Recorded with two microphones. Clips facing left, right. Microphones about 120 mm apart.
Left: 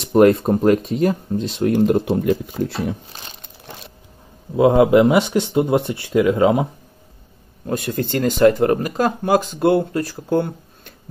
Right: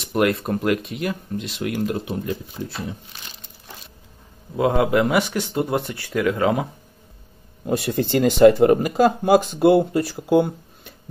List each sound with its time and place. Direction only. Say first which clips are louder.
0.0 s speech: left 8 dB; 35° left (ahead or behind)
1.9 s speech: left 9 dB; 45° left (ahead or behind)
2.7 s speech: left 7 dB; 70° left (ahead or behind)
4.6 s speech: left 6 dB; 25° left (ahead or behind)
7.6 s speech: right 1 dB; 15° right (ahead or behind)